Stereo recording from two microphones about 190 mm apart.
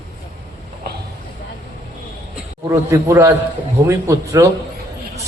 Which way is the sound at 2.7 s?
15° right (ahead or behind).